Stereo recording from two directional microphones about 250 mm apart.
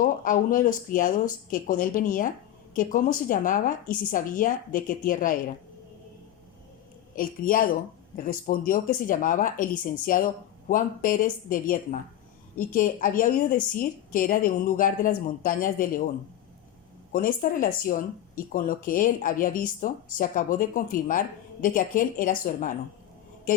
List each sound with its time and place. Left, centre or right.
0.0 s speech: left
7.2 s speech: left
17.1 s speech: left